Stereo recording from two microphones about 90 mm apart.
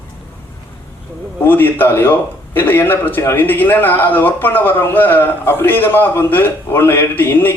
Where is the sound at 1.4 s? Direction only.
20° left (ahead or behind).